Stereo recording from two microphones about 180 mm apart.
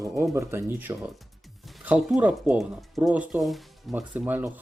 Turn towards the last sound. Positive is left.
turn(degrees=-10)  # may be behind; listen again after turning